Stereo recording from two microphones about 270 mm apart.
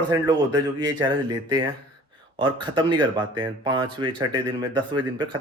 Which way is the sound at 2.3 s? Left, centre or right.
Centre.